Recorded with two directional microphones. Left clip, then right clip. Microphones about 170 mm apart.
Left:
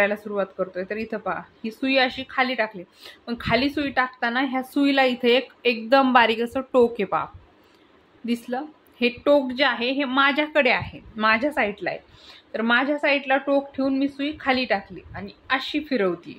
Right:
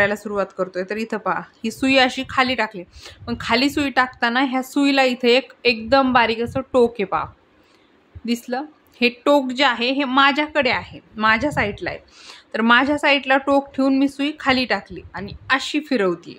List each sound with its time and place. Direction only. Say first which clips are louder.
0.0 s speech: right 3 dB; 35° right (ahead or behind); by 7.2 s 20° right (ahead or behind)
8.3 s a woman's voice: right 3 dB; 25° right (ahead or behind)
12.2 s speech: right 5 dB; 40° right (ahead or behind)